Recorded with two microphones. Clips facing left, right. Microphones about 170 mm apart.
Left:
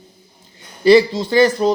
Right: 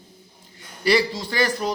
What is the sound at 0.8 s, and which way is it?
Speech, 25° left (ahead or behind).